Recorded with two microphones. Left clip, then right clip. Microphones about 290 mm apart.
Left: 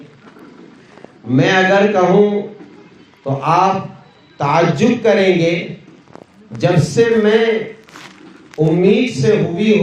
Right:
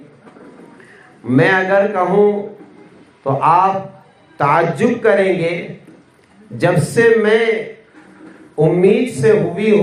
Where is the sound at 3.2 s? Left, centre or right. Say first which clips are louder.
Right 2 dB; right.